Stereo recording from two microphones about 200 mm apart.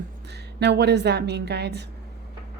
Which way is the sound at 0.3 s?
55° right (ahead or behind).